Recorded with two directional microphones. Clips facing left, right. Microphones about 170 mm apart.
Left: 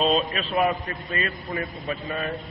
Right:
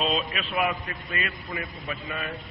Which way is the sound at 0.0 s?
40° left (ahead or behind).